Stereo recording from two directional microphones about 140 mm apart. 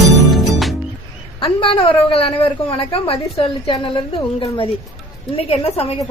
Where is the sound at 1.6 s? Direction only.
40° left (ahead or behind).